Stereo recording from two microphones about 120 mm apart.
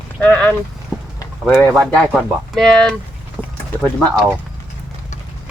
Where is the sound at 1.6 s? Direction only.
10° left (ahead or behind).